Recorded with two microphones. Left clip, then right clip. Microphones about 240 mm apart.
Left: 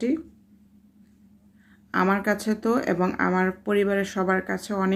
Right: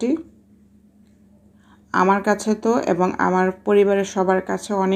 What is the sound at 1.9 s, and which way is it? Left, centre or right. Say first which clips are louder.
Speech: right 6 dB; centre.